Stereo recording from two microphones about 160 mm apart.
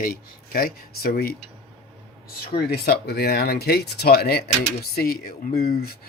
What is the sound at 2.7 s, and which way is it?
Speech, 90° left.